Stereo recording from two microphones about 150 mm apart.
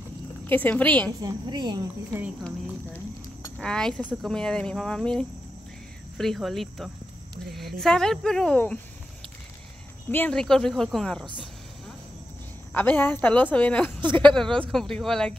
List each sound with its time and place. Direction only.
0.5 s speech: 10° left (ahead or behind)
1.2 s speech: 30° right (ahead or behind)
3.5 s speech: 5° left (ahead or behind)
10.1 s speech: 10° left (ahead or behind)
12.7 s speech: 15° left (ahead or behind)